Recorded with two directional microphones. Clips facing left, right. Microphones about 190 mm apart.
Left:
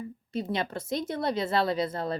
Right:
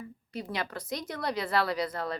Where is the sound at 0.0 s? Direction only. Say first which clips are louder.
Left 6 dB; 25° left (ahead or behind).